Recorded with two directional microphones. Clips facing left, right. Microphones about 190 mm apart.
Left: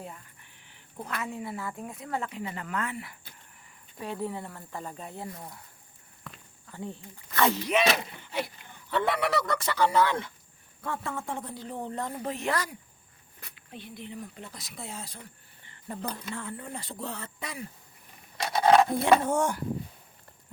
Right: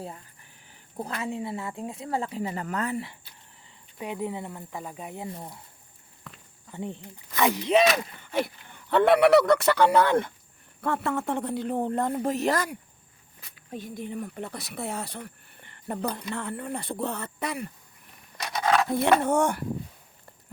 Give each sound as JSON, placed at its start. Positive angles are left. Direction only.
{"t": 0.7, "sound": "speech", "side_deg": -35}
{"t": 4.0, "sound": "speech", "side_deg": -15}
{"t": 6.7, "sound": "speech", "side_deg": -20}
{"t": 8.2, "sound": "speech", "side_deg": -50}
{"t": 10.8, "sound": "speech", "side_deg": -65}
{"t": 13.7, "sound": "speech", "side_deg": -45}
{"t": 18.3, "sound": "a sound", "side_deg": 25}
{"t": 19.0, "sound": "speech", "side_deg": -60}